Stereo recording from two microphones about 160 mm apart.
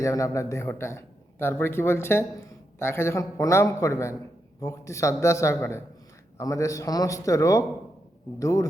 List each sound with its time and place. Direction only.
0.0 s a man's voice: 20° left (ahead or behind)